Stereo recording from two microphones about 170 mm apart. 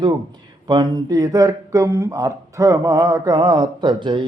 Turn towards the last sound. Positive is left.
turn(degrees=-30)  # may be behind; listen again after turning